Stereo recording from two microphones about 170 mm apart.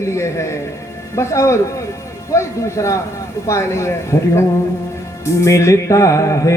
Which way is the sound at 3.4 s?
15° left (ahead or behind).